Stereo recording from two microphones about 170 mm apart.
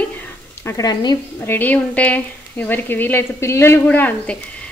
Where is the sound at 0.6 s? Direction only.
20° left (ahead or behind).